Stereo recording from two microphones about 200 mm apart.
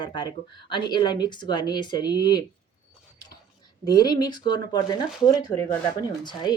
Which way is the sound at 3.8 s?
20° left (ahead or behind).